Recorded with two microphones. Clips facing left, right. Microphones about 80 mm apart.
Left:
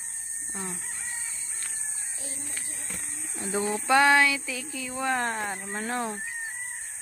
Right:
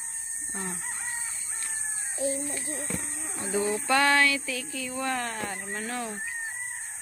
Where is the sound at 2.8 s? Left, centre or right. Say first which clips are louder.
Right 7 dB; right.